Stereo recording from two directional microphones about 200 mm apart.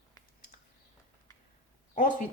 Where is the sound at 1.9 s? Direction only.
40° left (ahead or behind).